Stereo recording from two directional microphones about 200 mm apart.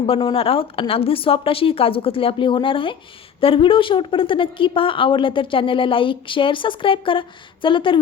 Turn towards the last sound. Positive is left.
turn(degrees=25)  # may be behind; listen again after turning